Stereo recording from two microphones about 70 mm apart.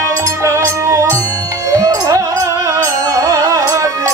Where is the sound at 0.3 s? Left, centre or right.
Right.